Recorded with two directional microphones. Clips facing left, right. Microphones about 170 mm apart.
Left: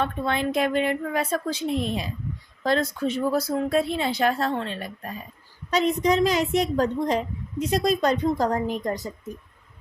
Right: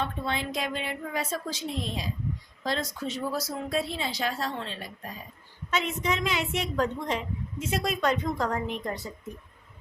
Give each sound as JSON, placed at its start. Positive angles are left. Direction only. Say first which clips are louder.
{"t": 0.0, "sound": "a woman's voice", "louder": "left 6 dB", "side_deg": 55}
{"t": 5.7, "sound": "a woman's voice", "louder": "left 8 dB", "side_deg": 35}